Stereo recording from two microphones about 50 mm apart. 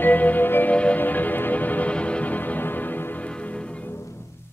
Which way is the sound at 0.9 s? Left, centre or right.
Left.